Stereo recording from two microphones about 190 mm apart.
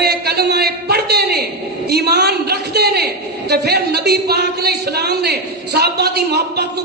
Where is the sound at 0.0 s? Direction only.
55° right (ahead or behind).